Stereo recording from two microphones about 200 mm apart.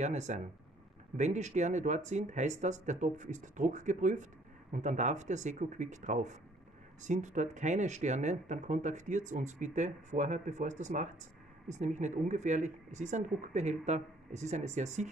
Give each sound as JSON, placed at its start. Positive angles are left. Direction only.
{"t": 0.0, "sound": "speech", "side_deg": -35}